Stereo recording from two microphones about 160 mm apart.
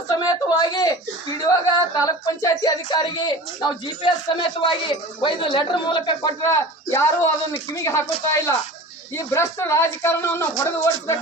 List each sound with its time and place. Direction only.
0.1 s speech: 25° left (ahead or behind)